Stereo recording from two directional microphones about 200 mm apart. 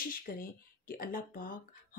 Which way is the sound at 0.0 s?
45° left (ahead or behind).